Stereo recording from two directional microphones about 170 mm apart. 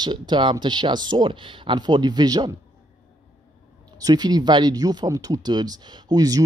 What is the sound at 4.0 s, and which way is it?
Speech, 25° right (ahead or behind).